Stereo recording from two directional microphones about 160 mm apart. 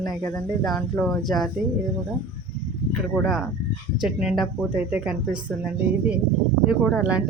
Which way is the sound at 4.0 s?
5° right (ahead or behind).